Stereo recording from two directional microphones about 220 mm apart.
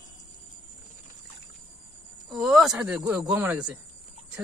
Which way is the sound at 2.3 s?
Centre (ahead or behind).